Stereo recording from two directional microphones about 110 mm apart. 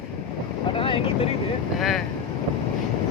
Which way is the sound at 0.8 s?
55° left (ahead or behind).